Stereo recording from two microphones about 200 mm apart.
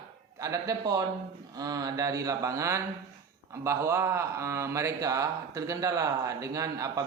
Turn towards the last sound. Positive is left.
turn(degrees=-15)  # may be behind; listen again after turning